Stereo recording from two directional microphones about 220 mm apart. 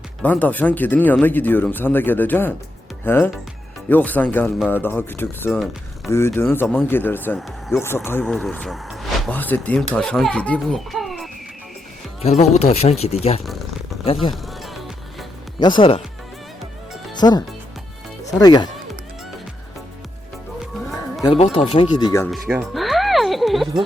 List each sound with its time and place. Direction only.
0.2 s speech: 5° left (ahead or behind)
12.2 s speech: 30° left (ahead or behind)
13.4 s speech: centre (ahead or behind)
14.0 s speech: 25° left (ahead or behind)
15.5 s speech: 20° left (ahead or behind)
17.2 s speech: 20° left (ahead or behind)
21.3 s speech: 25° left (ahead or behind)
22.3 s music: centre (ahead or behind)